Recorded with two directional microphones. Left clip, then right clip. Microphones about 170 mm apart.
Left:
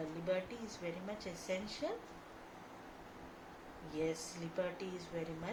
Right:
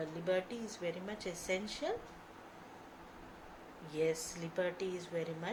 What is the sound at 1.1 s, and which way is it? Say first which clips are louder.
Speech: right 3 dB; 30° right (ahead or behind).